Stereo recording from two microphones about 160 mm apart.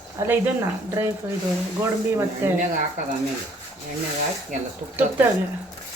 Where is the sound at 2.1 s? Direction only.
15° right (ahead or behind).